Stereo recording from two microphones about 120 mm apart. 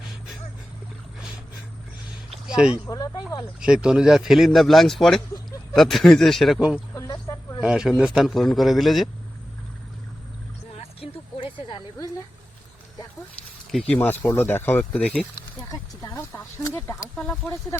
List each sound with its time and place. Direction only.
2.5 s speech: 5° right (ahead or behind)
2.9 s speech: 30° left (ahead or behind)
3.6 s speech: 5° right (ahead or behind)
6.9 s snake: 30° left (ahead or behind)
7.6 s speech: 5° right (ahead or behind)
10.8 s a sound: 50° left (ahead or behind)
13.8 s speech: 15° left (ahead or behind)
16.6 s a sound: 25° left (ahead or behind)
17.4 s speech: 25° left (ahead or behind)